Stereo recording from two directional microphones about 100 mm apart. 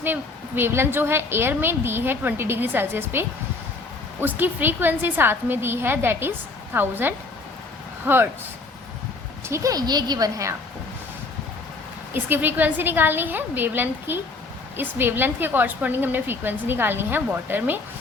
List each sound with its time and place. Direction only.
0.0 s a woman's voice: 20° right (ahead or behind)
9.5 s a woman's voice: 40° right (ahead or behind)
12.1 s a woman's voice: 20° right (ahead or behind)